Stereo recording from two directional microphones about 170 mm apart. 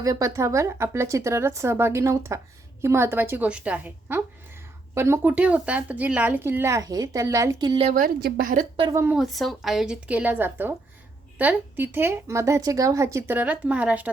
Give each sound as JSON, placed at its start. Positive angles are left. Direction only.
{"t": 0.0, "sound": "a woman's voice", "side_deg": -20}
{"t": 7.9, "sound": "a woman's voice", "side_deg": -50}
{"t": 8.9, "sound": "a woman's voice", "side_deg": -15}
{"t": 9.1, "sound": "a woman's voice", "side_deg": 0}